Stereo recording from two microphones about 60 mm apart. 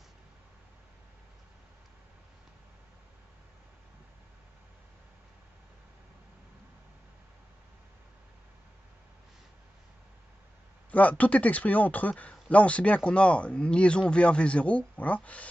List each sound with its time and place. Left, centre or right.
10.9 s speech: left